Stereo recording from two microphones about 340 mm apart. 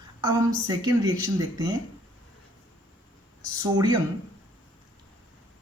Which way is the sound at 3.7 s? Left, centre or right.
Centre.